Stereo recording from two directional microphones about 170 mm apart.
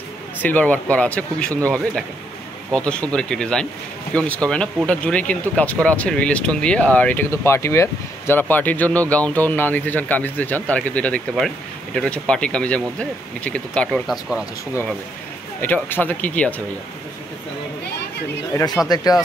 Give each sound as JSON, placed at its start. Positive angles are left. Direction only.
{"t": 0.4, "sound": "speech", "side_deg": 10}
{"t": 2.7, "sound": "speech", "side_deg": 5}
{"t": 15.6, "sound": "speech", "side_deg": 10}
{"t": 18.5, "sound": "speech", "side_deg": 15}